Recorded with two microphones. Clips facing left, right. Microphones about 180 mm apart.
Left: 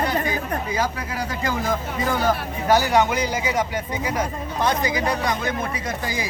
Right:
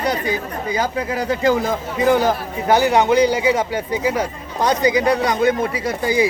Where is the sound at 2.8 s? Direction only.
30° right (ahead or behind).